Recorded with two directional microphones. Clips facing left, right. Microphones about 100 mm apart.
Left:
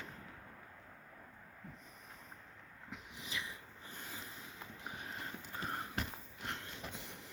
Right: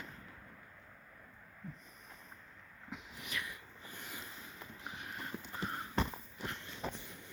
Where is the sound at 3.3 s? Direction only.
25° left (ahead or behind).